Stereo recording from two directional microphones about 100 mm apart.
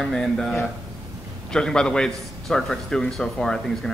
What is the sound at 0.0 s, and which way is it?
A man's voice, 5° left (ahead or behind).